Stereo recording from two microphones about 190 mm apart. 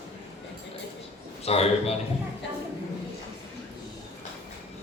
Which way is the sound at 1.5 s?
35° left (ahead or behind).